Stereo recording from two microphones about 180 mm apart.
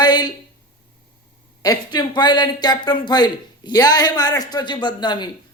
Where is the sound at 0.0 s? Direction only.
25° left (ahead or behind).